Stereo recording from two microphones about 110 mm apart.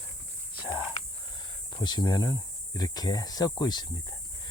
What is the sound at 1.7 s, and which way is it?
Speech, 40° left (ahead or behind).